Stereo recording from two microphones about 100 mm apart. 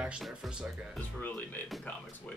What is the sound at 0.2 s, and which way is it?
Music, 5° right (ahead or behind).